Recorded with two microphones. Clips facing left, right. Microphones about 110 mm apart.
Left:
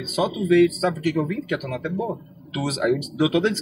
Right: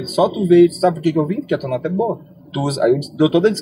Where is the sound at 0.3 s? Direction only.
30° right (ahead or behind).